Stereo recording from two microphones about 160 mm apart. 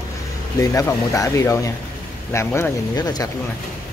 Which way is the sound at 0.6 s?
20° left (ahead or behind).